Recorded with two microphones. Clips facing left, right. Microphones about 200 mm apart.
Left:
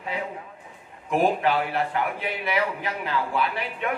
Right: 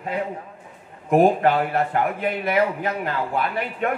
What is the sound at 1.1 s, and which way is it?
A man's voice, 50° right (ahead or behind).